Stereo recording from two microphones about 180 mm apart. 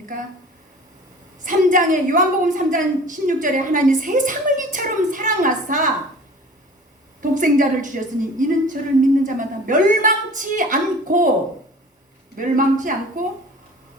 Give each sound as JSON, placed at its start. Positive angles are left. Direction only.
{"t": 1.5, "sound": "a woman's voice", "side_deg": -45}
{"t": 7.2, "sound": "a woman's voice", "side_deg": -45}
{"t": 12.4, "sound": "a woman's voice", "side_deg": -45}